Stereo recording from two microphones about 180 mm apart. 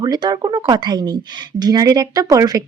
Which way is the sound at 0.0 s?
25° right (ahead or behind).